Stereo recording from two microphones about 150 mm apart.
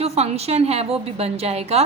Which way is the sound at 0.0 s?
45° right (ahead or behind).